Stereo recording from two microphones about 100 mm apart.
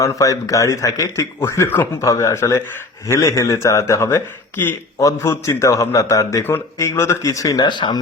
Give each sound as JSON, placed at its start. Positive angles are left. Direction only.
{"t": 0.0, "sound": "a man's voice", "side_deg": 35}
{"t": 7.6, "sound": "speech", "side_deg": 50}